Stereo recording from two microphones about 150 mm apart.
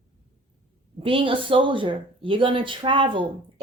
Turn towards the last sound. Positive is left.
turn(degrees=-35)  # may be behind; listen again after turning